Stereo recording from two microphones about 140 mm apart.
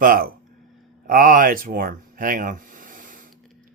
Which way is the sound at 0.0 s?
90° right.